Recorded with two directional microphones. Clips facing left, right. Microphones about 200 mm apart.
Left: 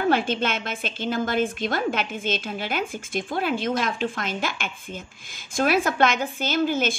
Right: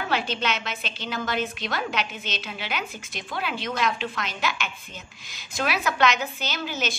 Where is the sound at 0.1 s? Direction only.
50° left (ahead or behind).